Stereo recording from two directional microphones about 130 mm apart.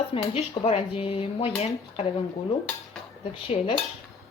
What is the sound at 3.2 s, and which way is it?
Speech, 45° left (ahead or behind).